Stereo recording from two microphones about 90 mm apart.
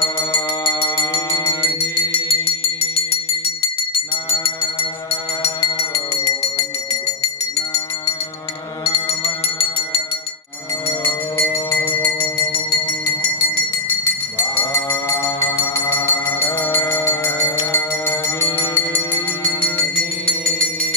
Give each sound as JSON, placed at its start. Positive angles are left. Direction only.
{"t": 0.0, "sound": "music", "side_deg": 70}
{"t": 2.1, "sound": "music", "side_deg": 90}
{"t": 5.8, "sound": "music", "side_deg": 35}
{"t": 8.8, "sound": "music", "side_deg": 90}
{"t": 11.5, "sound": "music", "side_deg": 25}
{"t": 14.5, "sound": "livestock", "side_deg": 30}
{"t": 16.1, "sound": "music", "side_deg": 30}